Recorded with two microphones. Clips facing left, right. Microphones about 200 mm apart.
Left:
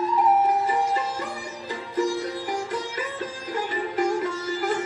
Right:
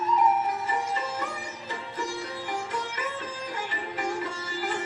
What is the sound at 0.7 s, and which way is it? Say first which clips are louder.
Music: left 6 dB; 35° left (ahead or behind).